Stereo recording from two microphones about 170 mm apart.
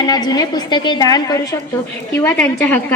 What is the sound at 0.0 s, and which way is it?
A woman's voice, 20° left (ahead or behind).